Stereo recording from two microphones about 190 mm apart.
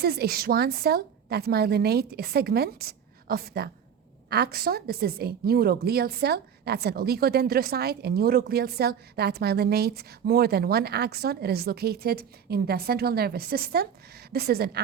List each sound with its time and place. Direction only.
0.0 s a woman's voice: 55° right (ahead or behind)